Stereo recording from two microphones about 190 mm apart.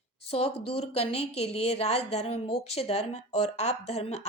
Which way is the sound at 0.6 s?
30° left (ahead or behind).